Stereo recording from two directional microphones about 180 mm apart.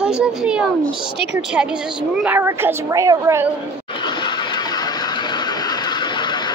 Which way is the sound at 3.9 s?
25° left (ahead or behind).